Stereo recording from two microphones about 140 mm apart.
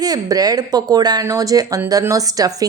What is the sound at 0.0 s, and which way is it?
Speech, 25° right (ahead or behind).